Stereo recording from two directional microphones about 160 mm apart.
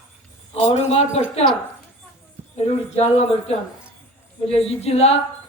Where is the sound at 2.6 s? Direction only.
40° left (ahead or behind).